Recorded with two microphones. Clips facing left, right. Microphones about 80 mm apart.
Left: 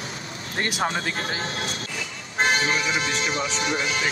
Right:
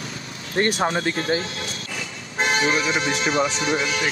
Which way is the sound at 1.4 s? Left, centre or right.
Left.